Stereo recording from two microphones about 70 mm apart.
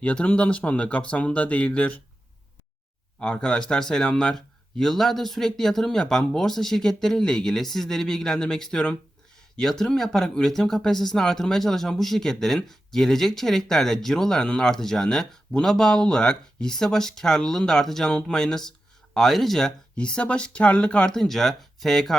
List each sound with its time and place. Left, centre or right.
0.0 s speech: centre
3.2 s speech: centre
21.1 s speech: centre